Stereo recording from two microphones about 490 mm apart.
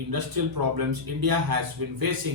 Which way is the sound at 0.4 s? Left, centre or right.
Right.